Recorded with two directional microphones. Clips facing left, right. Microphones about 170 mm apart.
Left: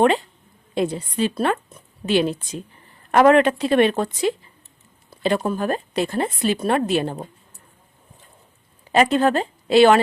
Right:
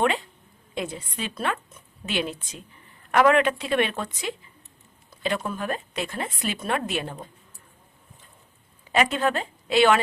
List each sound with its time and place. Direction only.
0.7 s a woman's voice: 35° left (ahead or behind)
8.9 s a woman's voice: 35° left (ahead or behind)